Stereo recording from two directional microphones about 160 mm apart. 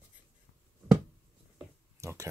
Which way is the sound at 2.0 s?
20° right (ahead or behind).